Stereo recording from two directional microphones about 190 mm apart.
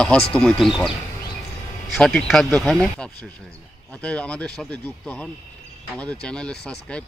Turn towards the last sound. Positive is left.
turn(degrees=5)  # may be behind; listen again after turning